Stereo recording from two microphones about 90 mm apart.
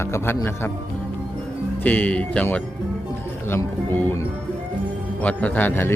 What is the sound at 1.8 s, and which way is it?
Speech, 20° left (ahead or behind).